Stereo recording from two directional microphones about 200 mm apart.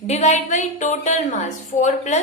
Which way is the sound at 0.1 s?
35° left (ahead or behind).